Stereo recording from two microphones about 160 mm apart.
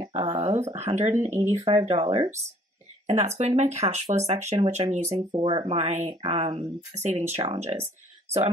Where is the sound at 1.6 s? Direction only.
30° right (ahead or behind).